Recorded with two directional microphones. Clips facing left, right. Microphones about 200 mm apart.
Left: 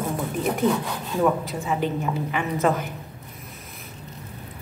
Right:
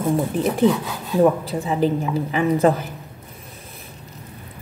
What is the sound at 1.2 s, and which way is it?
A woman's voice, 35° right (ahead or behind).